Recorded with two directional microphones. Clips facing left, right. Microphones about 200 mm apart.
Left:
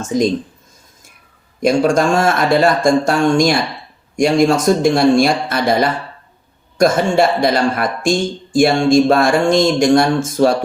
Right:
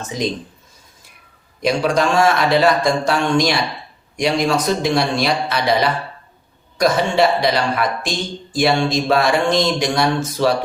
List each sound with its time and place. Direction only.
0.0 s speech: 45° left (ahead or behind)
1.6 s speech: 50° left (ahead or behind)